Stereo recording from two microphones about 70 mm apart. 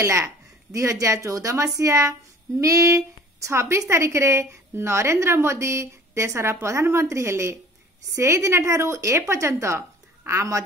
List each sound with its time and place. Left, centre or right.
0.0 s a woman's voice: right